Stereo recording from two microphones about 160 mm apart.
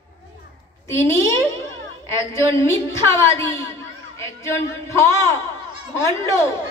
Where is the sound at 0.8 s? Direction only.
15° left (ahead or behind).